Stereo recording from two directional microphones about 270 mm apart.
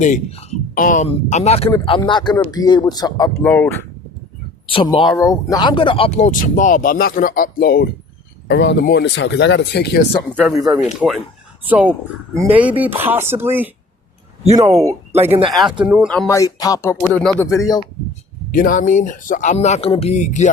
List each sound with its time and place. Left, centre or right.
0.0 s speech: left; by 3.8 s centre
4.6 s speech: centre; by 10.0 s left
10.8 s speech: centre
14.4 s speech: right
14.7 s speech: centre
15.4 s speech: centre
18.5 s speech: left